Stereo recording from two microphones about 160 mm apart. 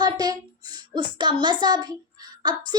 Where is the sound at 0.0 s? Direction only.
25° right (ahead or behind).